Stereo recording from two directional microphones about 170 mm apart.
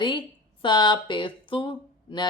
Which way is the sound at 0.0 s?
30° left (ahead or behind).